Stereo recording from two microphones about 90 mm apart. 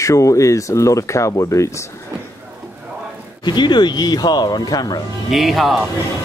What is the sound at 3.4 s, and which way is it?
Speech, 55° left (ahead or behind).